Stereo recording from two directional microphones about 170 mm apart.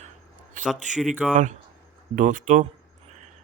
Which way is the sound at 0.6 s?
50° right (ahead or behind).